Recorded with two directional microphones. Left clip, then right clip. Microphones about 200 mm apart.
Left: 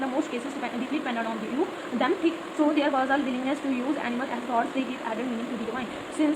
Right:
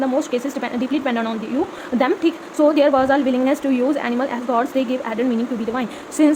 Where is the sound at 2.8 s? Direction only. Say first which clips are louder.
Right 9 dB; 45° right (ahead or behind).